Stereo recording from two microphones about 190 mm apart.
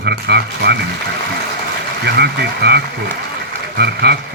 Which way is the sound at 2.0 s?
60° right (ahead or behind).